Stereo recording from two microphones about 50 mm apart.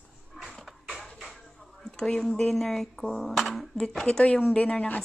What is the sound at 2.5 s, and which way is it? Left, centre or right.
Speech, centre.